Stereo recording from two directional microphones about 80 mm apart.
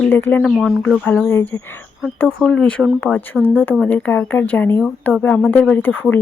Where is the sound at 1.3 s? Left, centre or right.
Left.